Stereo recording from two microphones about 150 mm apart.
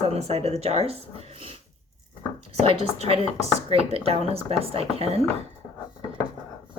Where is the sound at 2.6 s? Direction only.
40° right (ahead or behind).